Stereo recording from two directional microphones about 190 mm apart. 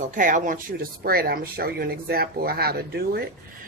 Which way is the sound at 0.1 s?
45° right (ahead or behind).